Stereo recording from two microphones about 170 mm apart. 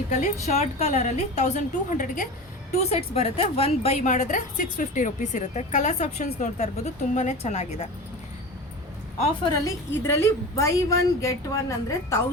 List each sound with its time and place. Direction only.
0.1 s a woman's voice: 45° left (ahead or behind)
2.9 s a woman's voice: 35° left (ahead or behind)
9.5 s a woman's voice: 15° left (ahead or behind)